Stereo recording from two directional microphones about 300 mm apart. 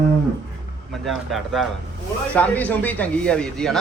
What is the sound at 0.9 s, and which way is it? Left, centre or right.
Speech, centre.